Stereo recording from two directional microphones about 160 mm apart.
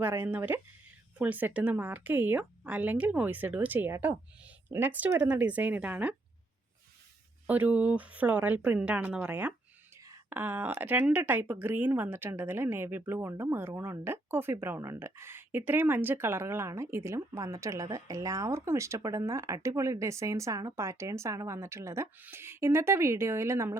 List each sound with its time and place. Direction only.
0.0 s speech: 15° right (ahead or behind)
7.4 s speech: 10° right (ahead or behind)